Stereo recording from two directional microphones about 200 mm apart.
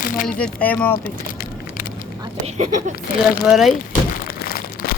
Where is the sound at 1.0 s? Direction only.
45° left (ahead or behind).